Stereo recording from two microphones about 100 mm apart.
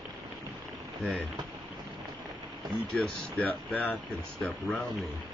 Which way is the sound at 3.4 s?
15° left (ahead or behind).